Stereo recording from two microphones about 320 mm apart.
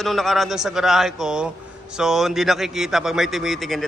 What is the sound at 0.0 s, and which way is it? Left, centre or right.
A man's voice, centre.